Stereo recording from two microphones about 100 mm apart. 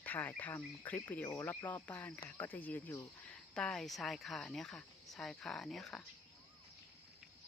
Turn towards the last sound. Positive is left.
turn(degrees=5)  # may be behind; listen again after turning